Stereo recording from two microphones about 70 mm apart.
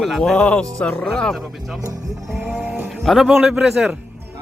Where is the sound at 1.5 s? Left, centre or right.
Centre.